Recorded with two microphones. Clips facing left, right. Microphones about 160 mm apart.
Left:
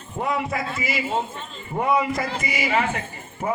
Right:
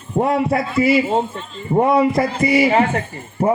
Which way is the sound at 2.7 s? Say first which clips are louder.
Right 7 dB; 40° right (ahead or behind).